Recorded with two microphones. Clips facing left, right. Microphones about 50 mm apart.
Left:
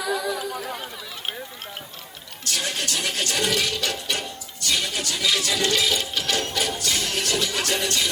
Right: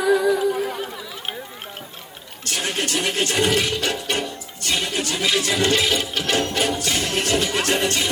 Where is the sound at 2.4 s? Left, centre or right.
Right.